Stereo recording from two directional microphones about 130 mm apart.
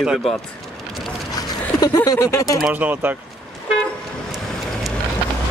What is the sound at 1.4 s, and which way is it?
Speech, 30° left (ahead or behind).